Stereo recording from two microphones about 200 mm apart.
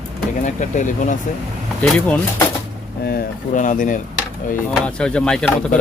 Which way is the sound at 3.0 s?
50° left (ahead or behind).